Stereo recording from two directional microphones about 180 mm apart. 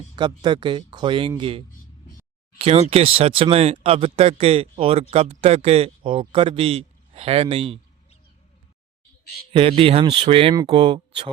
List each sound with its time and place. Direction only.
0.2 s a man's voice: 25° right (ahead or behind)
9.5 s speech: 30° right (ahead or behind)